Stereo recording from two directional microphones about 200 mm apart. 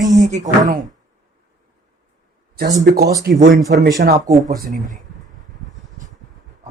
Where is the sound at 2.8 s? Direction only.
50° right (ahead or behind).